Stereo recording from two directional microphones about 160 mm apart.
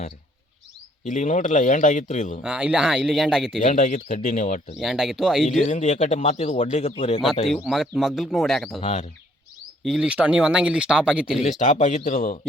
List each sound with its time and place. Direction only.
1.0 s a man's voice: 50° left (ahead or behind)
2.4 s speech: 5° right (ahead or behind)
3.6 s a man's voice: 50° left (ahead or behind)
4.8 s speech: centre (ahead or behind)
5.6 s a man's voice: 50° left (ahead or behind)
7.6 s speech: centre (ahead or behind)
8.8 s a man's voice: 40° left (ahead or behind)
9.8 s speech: 5° right (ahead or behind)
11.4 s a man's voice: 50° left (ahead or behind)